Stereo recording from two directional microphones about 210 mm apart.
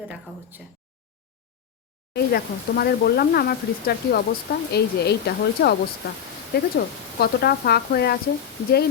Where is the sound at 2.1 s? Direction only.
50° left (ahead or behind).